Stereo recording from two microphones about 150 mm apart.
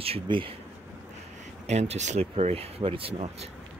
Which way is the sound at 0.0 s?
40° right (ahead or behind).